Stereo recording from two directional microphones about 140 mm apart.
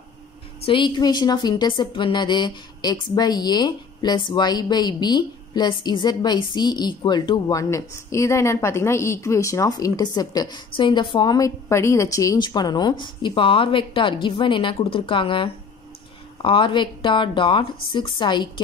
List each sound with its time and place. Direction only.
0.7 s a woman's voice: 35° left (ahead or behind)